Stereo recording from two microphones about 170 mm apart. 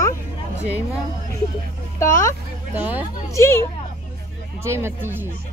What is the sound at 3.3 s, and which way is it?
Speech, 15° left (ahead or behind).